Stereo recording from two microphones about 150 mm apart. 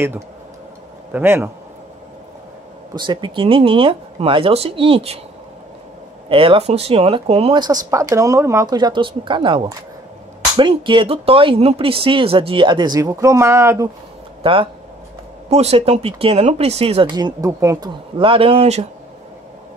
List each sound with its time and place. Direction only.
1.1 s a man's voice: 15° right (ahead or behind)
2.9 s speech: 30° right (ahead or behind)
6.2 s speech: 35° right (ahead or behind); by 13.8 s 20° right (ahead or behind)
14.4 s speech: 35° right (ahead or behind)